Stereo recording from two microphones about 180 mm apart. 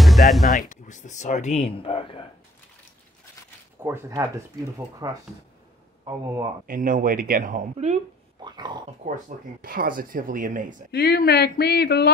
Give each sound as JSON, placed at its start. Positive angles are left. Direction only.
{"t": 0.0, "sound": "music", "side_deg": 0}
{"t": 0.6, "sound": "speech", "side_deg": 45}
{"t": 3.8, "sound": "speech", "side_deg": -15}
{"t": 6.7, "sound": "speech", "side_deg": -50}
{"t": 8.5, "sound": "speech", "side_deg": -25}
{"t": 9.0, "sound": "speech", "side_deg": -50}
{"t": 10.9, "sound": "speech", "side_deg": 60}